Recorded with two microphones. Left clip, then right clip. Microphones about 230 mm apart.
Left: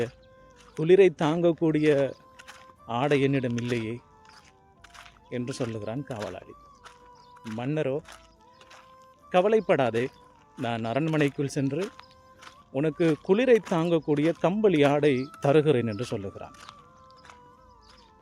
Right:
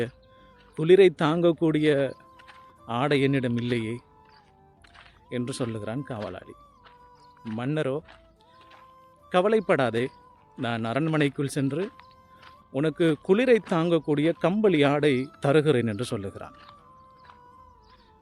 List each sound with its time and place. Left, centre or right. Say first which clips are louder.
0.8 s speech: right 1 dB; centre
5.3 s speech: right 1 dB; centre
9.3 s speech: even; centre
11.8 s a sound: right 1 dB; left
12.7 s speech: right 1 dB; centre